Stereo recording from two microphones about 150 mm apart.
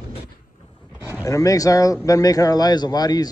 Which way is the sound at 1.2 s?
20° left (ahead or behind).